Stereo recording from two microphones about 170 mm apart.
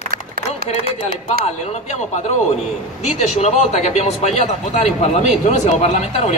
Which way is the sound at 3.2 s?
40° left (ahead or behind).